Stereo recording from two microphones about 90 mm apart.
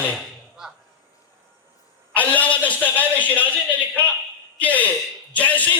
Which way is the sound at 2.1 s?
15° left (ahead or behind).